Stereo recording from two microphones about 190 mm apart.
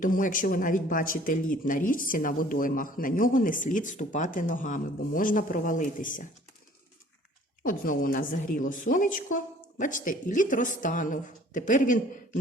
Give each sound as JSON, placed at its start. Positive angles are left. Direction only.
{"t": 0.0, "sound": "speech", "side_deg": 45}
{"t": 7.6, "sound": "speech", "side_deg": 45}